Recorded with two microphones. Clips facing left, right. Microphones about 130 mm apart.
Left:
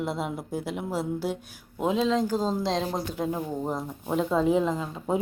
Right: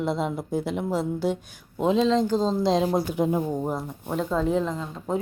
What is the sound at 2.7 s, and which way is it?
Speech, 5° right (ahead or behind).